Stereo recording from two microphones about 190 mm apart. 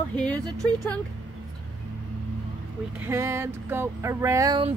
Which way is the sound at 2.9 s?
15° right (ahead or behind).